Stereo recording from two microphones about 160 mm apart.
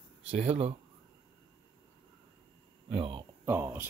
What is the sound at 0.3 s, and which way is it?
Speech, 40° right (ahead or behind).